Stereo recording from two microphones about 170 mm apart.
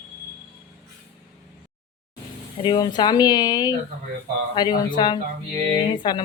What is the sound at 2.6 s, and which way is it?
Speech, 25° left (ahead or behind).